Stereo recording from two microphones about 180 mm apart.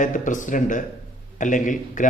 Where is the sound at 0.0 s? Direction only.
45° left (ahead or behind).